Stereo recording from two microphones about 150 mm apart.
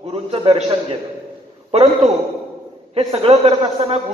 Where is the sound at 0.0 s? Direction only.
40° right (ahead or behind).